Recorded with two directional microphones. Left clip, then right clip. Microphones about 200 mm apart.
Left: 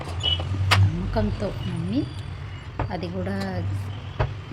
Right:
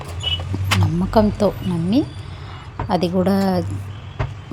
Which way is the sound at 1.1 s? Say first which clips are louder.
Right 12 dB; 35° right (ahead or behind).